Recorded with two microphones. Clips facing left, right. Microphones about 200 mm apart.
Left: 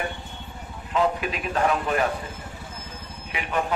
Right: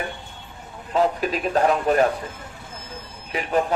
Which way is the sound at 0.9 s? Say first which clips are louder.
Right 3 dB; 40° right (ahead or behind).